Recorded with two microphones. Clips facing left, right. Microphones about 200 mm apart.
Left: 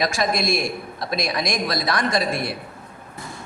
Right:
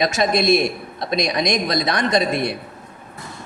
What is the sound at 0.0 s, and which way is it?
A man's voice, 25° right (ahead or behind).